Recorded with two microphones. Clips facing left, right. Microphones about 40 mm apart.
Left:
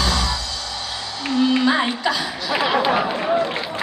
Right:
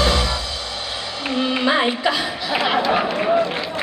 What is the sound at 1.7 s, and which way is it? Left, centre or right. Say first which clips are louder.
Music: right 1 dB; centre.